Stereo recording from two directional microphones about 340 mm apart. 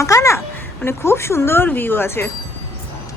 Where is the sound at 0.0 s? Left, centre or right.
Centre.